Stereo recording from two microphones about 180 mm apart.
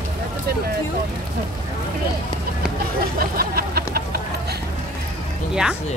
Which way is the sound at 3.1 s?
55° right (ahead or behind).